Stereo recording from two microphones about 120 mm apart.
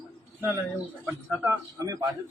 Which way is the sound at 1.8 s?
30° right (ahead or behind).